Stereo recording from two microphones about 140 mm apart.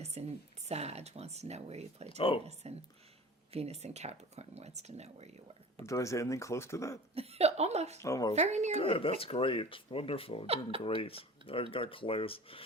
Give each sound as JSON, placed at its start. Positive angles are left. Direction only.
{"t": 0.0, "sound": "speech", "side_deg": -50}
{"t": 2.0, "sound": "speech", "side_deg": 40}
{"t": 2.4, "sound": "speech", "side_deg": -50}
{"t": 5.8, "sound": "speech", "side_deg": 20}
{"t": 7.1, "sound": "speech", "side_deg": -45}
{"t": 8.0, "sound": "speech", "side_deg": 25}
{"t": 8.4, "sound": "speech", "side_deg": -55}
{"t": 8.7, "sound": "speech", "side_deg": 40}
{"t": 10.4, "sound": "speech", "side_deg": -45}
{"t": 10.8, "sound": "speech", "side_deg": 40}